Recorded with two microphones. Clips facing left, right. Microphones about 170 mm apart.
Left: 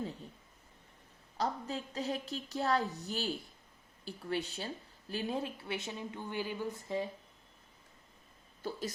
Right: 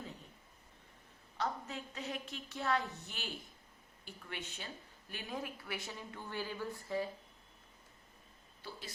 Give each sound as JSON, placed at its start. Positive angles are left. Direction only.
{"t": 1.4, "sound": "a woman's voice", "side_deg": 35}
{"t": 8.6, "sound": "speech", "side_deg": 45}